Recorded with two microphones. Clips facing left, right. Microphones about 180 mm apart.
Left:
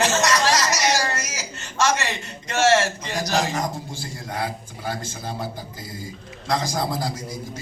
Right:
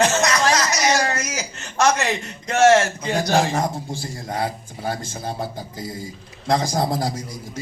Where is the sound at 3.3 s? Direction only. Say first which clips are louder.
Right 3 dB; 55° right (ahead or behind).